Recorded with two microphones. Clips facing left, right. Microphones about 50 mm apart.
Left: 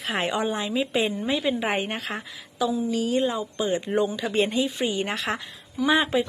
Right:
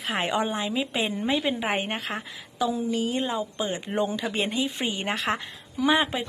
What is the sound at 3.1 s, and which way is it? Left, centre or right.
A woman's voice, centre.